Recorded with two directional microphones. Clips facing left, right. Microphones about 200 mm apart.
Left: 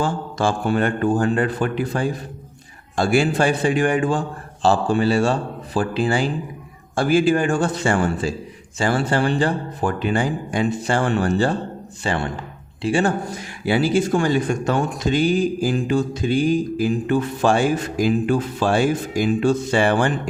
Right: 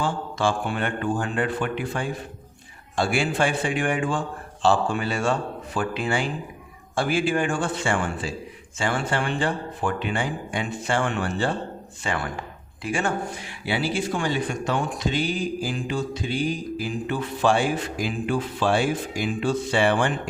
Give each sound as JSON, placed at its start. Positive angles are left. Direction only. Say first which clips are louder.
{"t": 0.0, "sound": "speech", "louder": "left 3 dB", "side_deg": 40}
{"t": 12.0, "sound": "a man's voice", "louder": "left 5 dB", "side_deg": 30}